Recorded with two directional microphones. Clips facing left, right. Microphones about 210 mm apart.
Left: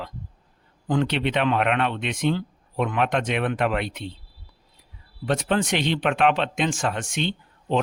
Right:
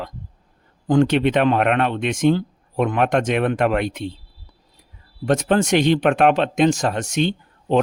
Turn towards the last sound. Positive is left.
turn(degrees=-45)  # may be behind; listen again after turning